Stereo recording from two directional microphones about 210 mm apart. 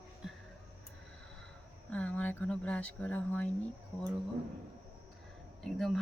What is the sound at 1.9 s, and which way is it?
Speech, 5° left (ahead or behind).